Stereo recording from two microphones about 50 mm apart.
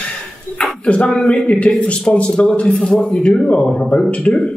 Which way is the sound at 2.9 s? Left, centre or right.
Centre.